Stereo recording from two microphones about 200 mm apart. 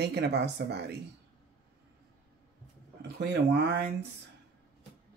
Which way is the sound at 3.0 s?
60° right (ahead or behind).